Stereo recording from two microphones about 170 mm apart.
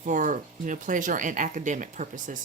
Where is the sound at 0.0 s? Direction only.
50° right (ahead or behind).